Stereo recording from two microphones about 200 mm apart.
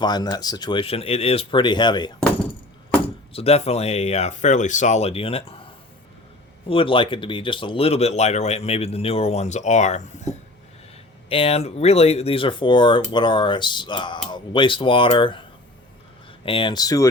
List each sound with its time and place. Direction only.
0.0 s speech: 20° left (ahead or behind)
3.3 s speech: 30° left (ahead or behind)
6.7 s speech: 25° left (ahead or behind)
16.5 s speech: 25° left (ahead or behind)